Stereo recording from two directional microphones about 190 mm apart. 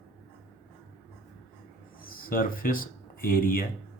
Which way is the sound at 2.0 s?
50° left (ahead or behind).